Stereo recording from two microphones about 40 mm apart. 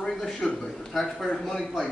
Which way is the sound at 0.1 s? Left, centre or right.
Centre.